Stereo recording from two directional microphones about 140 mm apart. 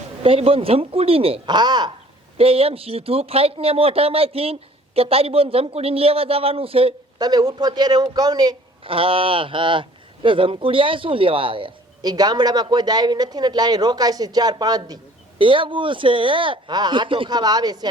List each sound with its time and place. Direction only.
0.2 s speech: 45° right (ahead or behind)
2.4 s speech: 45° right (ahead or behind)
7.2 s a man's voice: 30° right (ahead or behind)
8.9 s a man's voice: 40° right (ahead or behind)
15.4 s speech: 40° right (ahead or behind)